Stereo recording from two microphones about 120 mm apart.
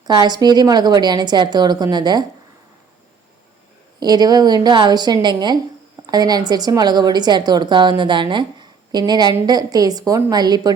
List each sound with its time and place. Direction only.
0.0 s speech: 35° right (ahead or behind)
4.0 s speech: 35° right (ahead or behind)